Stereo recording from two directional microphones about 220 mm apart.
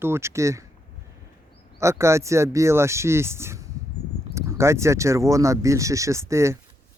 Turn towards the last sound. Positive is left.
turn(degrees=-15)  # may be behind; listen again after turning